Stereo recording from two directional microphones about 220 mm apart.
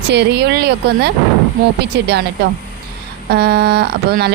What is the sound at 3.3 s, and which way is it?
Speech, 45° right (ahead or behind).